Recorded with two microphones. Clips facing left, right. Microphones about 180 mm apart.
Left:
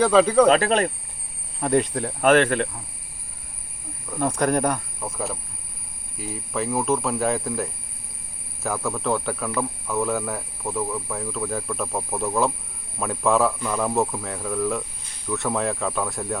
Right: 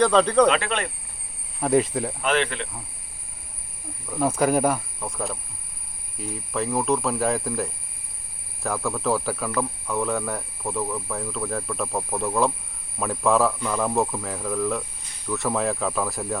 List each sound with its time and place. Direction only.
0.0 s speech: 5° left (ahead or behind)
0.4 s speech: 40° left (ahead or behind)
1.6 s speech: centre (ahead or behind)
2.2 s speech: 50° left (ahead or behind)
4.1 s speech: 5° right (ahead or behind)